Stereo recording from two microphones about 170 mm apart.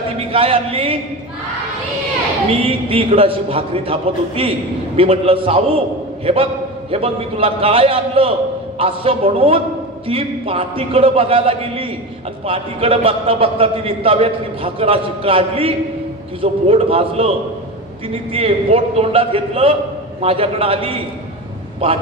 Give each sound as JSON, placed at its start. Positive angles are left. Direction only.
{"t": 0.3, "sound": "a man's voice", "side_deg": -35}
{"t": 2.6, "sound": "a man's voice", "side_deg": -35}
{"t": 18.3, "sound": "a man's voice", "side_deg": -35}